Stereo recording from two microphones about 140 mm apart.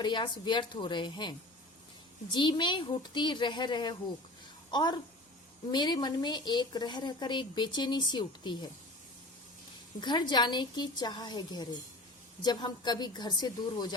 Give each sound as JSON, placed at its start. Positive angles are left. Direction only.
{"t": 0.0, "sound": "a woman's voice", "side_deg": 35}
{"t": 10.0, "sound": "a woman's voice", "side_deg": 30}